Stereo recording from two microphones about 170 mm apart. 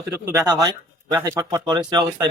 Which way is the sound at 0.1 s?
10° right (ahead or behind).